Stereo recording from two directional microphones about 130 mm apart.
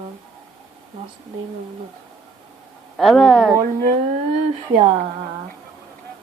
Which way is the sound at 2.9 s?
Centre (ahead or behind).